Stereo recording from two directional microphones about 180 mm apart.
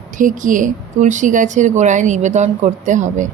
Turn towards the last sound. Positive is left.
turn(degrees=-40)  # may be behind; listen again after turning